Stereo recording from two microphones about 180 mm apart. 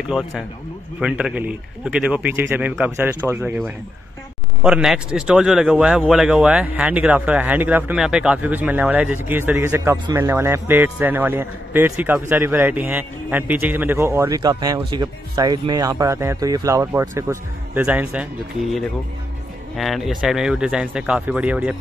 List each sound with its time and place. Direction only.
1.0 s a man's voice: 5° right (ahead or behind)